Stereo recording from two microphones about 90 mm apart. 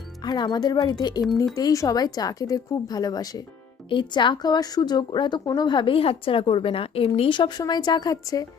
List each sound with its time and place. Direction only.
0.3 s speech: 50° left (ahead or behind)
3.8 s a woman's voice: 60° left (ahead or behind)
7.6 s speech: 50° left (ahead or behind)